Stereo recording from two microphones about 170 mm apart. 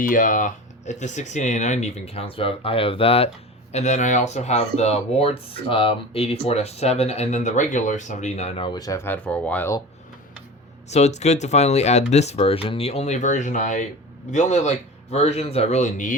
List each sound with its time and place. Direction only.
0.0 s speech: 50° left (ahead or behind); by 9.7 s 10° left (ahead or behind)
10.8 s speech: 40° left (ahead or behind)